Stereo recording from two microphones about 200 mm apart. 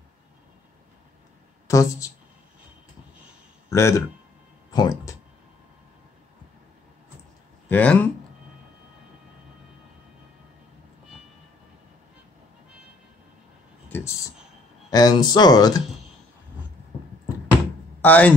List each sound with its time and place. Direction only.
1.7 s a woman's voice: 15° left (ahead or behind)
3.7 s speech: 15° left (ahead or behind)
7.6 s speech: 10° left (ahead or behind)
13.8 s a sound: 10° left (ahead or behind)
14.9 s speech: 20° left (ahead or behind)
18.0 s speech: 10° left (ahead or behind)